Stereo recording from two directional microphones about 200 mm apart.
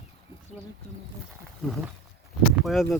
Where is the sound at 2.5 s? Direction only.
Centre (ahead or behind).